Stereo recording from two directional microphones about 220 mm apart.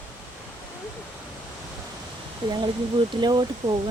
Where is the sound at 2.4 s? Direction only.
20° right (ahead or behind).